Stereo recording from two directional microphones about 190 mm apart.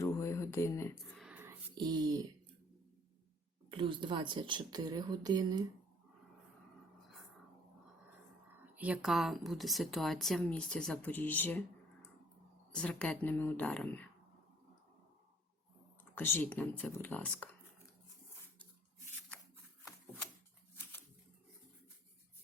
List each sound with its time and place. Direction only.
0.0 s a sound: 15° left (ahead or behind)
1.1 s a sound: 5° right (ahead or behind)
1.7 s speech: 20° right (ahead or behind)
3.7 s speech: 25° right (ahead or behind)
8.7 s speech: 5° right (ahead or behind); by 11.6 s 10° left (ahead or behind)
12.7 s a woman's voice: 5° left (ahead or behind)
16.1 s a woman's voice: 10° left (ahead or behind)